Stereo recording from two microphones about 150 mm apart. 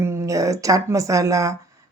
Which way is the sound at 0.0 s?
20° right (ahead or behind).